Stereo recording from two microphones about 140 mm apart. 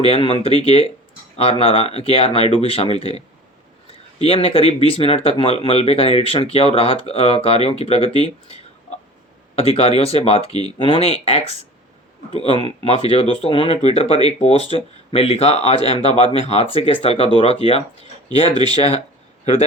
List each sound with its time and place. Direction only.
0.0 s speech: 45° left (ahead or behind)
9.6 s speech: 45° left (ahead or behind)
18.7 s speech: 45° left (ahead or behind)